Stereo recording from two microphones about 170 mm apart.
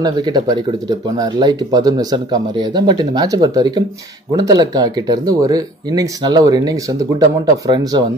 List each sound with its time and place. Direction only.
0.0 s speech: 25° right (ahead or behind)